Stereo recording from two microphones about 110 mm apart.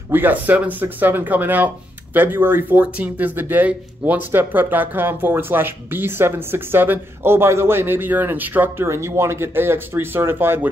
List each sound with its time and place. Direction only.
0.1 s speech: 15° right (ahead or behind)